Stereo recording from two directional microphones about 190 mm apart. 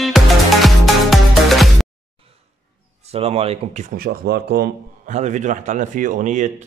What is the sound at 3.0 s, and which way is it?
Speech, 30° right (ahead or behind).